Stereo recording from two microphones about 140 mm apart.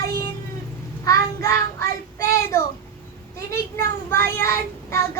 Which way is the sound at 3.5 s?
15° left (ahead or behind).